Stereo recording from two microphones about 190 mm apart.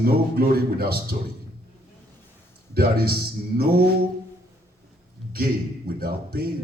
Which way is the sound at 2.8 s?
55° right (ahead or behind).